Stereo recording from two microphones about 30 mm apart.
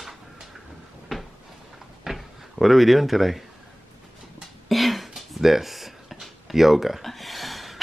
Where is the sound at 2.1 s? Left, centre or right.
Centre.